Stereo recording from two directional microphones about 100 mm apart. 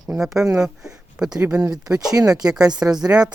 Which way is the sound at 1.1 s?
5° right (ahead or behind).